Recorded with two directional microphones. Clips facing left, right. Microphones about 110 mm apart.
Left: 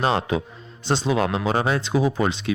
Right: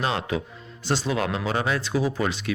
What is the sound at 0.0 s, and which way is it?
Speech, 30° left (ahead or behind).